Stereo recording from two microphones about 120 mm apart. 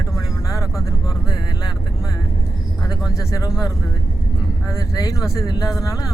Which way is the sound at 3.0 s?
30° left (ahead or behind).